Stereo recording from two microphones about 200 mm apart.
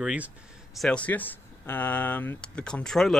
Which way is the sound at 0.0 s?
5° right (ahead or behind).